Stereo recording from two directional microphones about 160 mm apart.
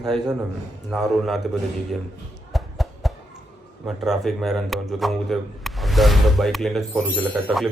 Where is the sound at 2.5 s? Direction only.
Centre (ahead or behind).